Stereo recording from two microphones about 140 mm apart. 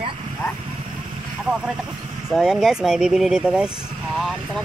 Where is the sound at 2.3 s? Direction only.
Centre (ahead or behind).